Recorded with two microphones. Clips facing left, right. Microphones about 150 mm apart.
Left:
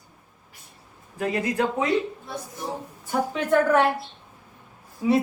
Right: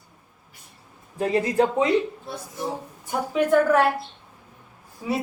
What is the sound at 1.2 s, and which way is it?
Speech, 30° right (ahead or behind).